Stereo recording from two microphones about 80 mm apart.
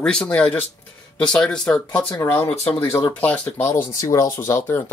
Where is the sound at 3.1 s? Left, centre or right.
Centre.